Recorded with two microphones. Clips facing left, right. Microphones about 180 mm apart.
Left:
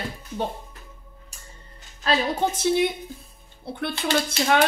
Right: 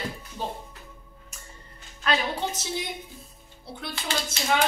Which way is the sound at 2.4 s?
55° left (ahead or behind).